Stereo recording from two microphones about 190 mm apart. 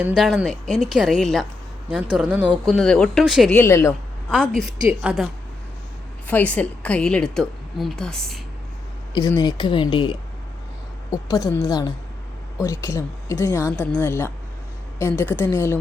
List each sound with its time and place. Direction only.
0.0 s a woman's voice: 5° right (ahead or behind)
3.5 s speech: 15° left (ahead or behind)
4.3 s a woman's voice: 5° left (ahead or behind)
9.1 s speech: 20° left (ahead or behind)